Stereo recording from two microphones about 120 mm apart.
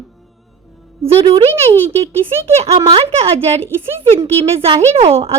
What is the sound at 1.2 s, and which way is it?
Speech, 55° right (ahead or behind).